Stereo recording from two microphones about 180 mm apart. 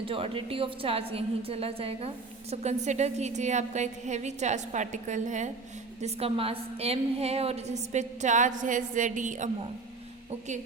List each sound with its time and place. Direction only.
0.0 s a woman's voice: 30° right (ahead or behind)